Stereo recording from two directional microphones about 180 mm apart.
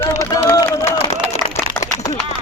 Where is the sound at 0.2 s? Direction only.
20° left (ahead or behind).